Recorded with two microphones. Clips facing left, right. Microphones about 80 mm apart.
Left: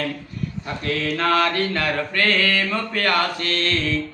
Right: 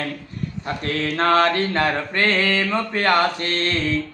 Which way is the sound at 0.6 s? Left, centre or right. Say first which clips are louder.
Right 1 dB; right.